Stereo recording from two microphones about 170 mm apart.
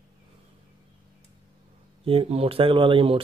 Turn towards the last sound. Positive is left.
turn(degrees=-30)  # may be behind; listen again after turning